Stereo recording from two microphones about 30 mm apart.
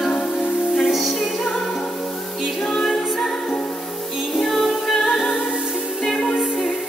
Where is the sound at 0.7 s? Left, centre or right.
Centre.